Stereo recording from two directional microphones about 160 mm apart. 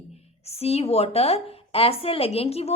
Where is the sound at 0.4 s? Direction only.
40° left (ahead or behind).